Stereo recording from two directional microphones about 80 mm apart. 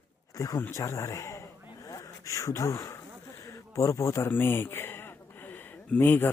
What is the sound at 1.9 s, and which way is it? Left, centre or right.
Gasp, left.